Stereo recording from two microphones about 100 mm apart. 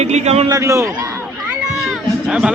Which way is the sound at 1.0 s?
25° right (ahead or behind).